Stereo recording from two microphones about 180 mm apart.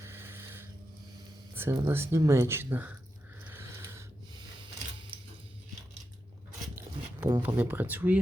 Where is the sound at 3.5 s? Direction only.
15° right (ahead or behind).